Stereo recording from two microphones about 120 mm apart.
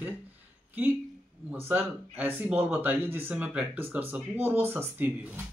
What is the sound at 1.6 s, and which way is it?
Speech, 15° right (ahead or behind).